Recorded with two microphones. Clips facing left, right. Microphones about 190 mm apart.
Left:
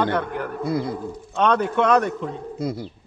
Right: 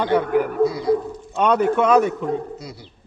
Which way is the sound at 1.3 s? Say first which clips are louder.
Right 3 dB; 5° right (ahead or behind).